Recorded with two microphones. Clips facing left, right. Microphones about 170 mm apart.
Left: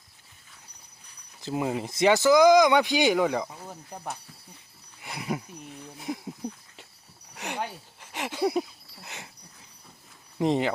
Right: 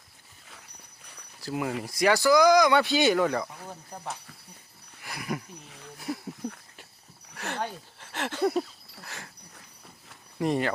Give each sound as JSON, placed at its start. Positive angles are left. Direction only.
{"t": 1.4, "sound": "speech", "side_deg": 20}
{"t": 5.0, "sound": "speech", "side_deg": 25}
{"t": 6.1, "sound": "a sound", "side_deg": 20}
{"t": 7.3, "sound": "speech", "side_deg": 15}
{"t": 9.0, "sound": "dog", "side_deg": 20}
{"t": 10.3, "sound": "speech", "side_deg": 20}